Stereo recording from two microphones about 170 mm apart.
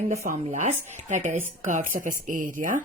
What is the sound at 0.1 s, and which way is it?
Speech, 45° right (ahead or behind).